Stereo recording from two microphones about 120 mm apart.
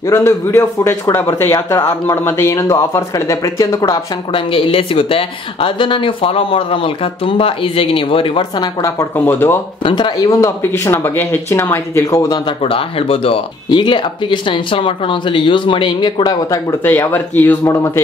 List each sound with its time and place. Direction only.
0.1 s speech: 20° left (ahead or behind)
4.3 s speech: 45° left (ahead or behind)
9.2 s speech: 15° left (ahead or behind)
9.8 s speech: 40° left (ahead or behind)
10.4 s speech: 20° left (ahead or behind)
12.6 s speech: 50° left (ahead or behind)
16.8 s speech: 15° left (ahead or behind)